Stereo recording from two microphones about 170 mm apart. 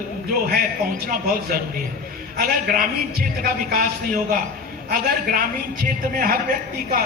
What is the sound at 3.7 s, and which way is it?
A man's voice, 60° right (ahead or behind).